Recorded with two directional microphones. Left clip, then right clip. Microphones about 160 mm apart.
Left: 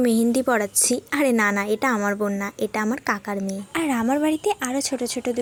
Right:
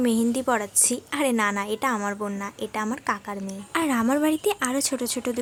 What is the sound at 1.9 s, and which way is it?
Speech, 15° left (ahead or behind).